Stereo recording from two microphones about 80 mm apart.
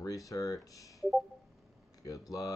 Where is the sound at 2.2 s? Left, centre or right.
Left.